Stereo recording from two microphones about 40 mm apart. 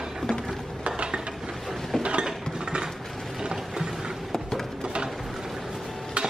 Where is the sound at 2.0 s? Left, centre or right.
Right.